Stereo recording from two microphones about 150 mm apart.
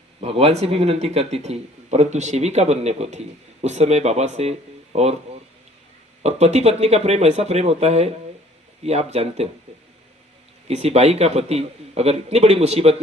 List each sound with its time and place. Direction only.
0.2 s speech: 45° right (ahead or behind)
6.2 s speech: 50° right (ahead or behind)
10.7 s speech: 45° right (ahead or behind)